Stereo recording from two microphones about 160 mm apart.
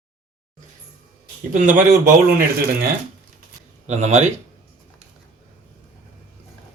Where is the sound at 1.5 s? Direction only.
55° right (ahead or behind).